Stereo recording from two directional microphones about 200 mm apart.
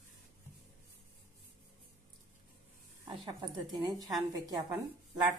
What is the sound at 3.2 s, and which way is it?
A woman's voice, 20° right (ahead or behind).